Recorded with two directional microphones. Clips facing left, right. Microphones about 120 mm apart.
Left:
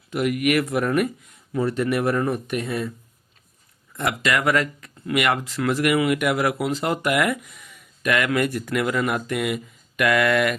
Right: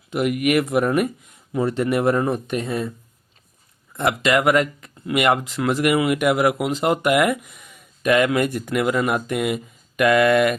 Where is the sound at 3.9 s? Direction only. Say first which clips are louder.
Right 4 dB; 25° right (ahead or behind).